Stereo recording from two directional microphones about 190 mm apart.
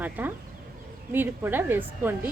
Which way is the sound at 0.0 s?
10° right (ahead or behind).